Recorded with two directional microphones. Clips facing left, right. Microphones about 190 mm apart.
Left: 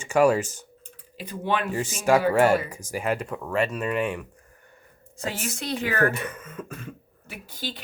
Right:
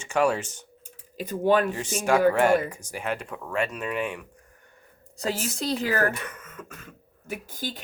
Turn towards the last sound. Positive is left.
turn(degrees=-45)  # may be behind; listen again after turning